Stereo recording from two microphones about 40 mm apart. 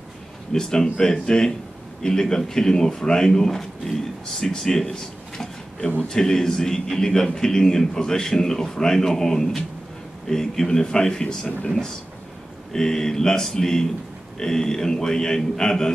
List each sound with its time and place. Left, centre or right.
0.5 s a man's voice: centre
12.7 s a man's voice: centre